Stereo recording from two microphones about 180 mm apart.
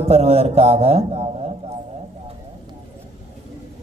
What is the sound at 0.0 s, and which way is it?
A man's voice, 35° right (ahead or behind).